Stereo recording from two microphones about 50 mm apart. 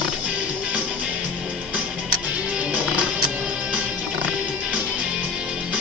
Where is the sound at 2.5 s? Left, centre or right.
Right.